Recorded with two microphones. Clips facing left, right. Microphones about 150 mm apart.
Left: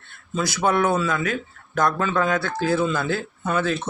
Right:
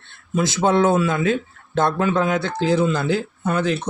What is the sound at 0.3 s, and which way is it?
Speech, 20° right (ahead or behind).